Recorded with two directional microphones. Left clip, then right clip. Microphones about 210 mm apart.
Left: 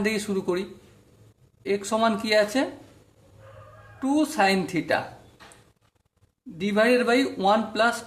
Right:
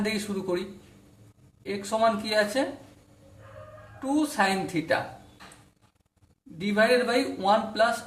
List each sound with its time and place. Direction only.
0.0 s a man's voice: 40° left (ahead or behind)
1.6 s a man's voice: 40° left (ahead or behind)
4.0 s a man's voice: 40° left (ahead or behind)
6.6 s a man's voice: 40° left (ahead or behind)